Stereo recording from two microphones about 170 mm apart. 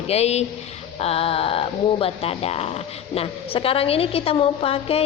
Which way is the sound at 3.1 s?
35° left (ahead or behind).